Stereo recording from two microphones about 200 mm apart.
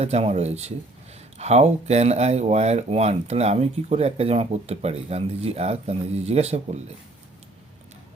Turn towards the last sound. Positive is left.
turn(degrees=-35)  # may be behind; listen again after turning